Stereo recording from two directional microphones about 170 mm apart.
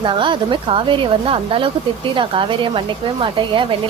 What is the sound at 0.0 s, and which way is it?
A woman's voice, 30° right (ahead or behind).